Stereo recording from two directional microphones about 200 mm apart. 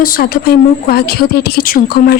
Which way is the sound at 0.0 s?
45° left (ahead or behind).